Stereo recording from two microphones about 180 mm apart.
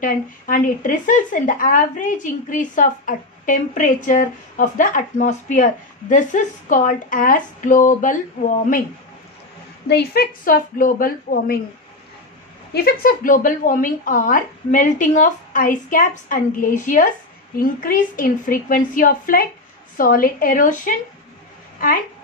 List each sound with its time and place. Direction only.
0.0 s a woman's voice: 50° left (ahead or behind)
9.8 s speech: 60° left (ahead or behind)
12.7 s a woman's voice: 55° left (ahead or behind)